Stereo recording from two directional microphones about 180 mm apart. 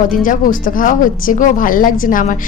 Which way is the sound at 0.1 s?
50° left (ahead or behind).